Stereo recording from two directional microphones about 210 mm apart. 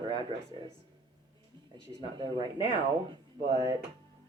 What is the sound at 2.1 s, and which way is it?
Speech, 20° right (ahead or behind).